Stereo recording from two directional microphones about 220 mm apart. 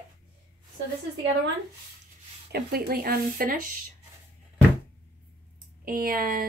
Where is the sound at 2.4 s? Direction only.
45° right (ahead or behind).